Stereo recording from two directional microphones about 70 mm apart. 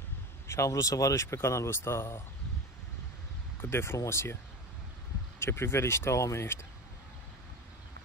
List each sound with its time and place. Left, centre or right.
0.5 s speech: left
3.6 s speech: left
5.4 s speech: left